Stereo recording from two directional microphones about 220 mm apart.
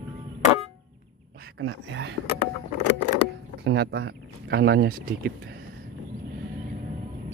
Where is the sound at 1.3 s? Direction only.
45° right (ahead or behind).